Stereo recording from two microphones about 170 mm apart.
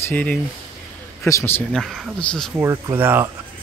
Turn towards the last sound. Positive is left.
turn(degrees=-10)  # may be behind; listen again after turning